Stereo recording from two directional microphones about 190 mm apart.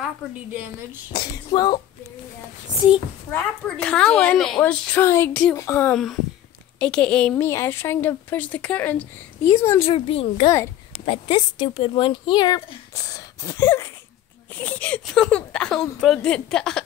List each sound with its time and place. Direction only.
1.1 s speech: 20° left (ahead or behind)
3.6 s a woman's voice: 5° left (ahead or behind)
9.8 s a child's voice: 30° left (ahead or behind)
10.5 s a child's voice: 10° left (ahead or behind)
11.1 s speech: 25° left (ahead or behind); by 16.8 s 5° left (ahead or behind)